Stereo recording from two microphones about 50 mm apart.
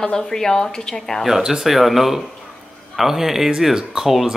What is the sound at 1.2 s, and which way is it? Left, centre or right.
Speech, centre.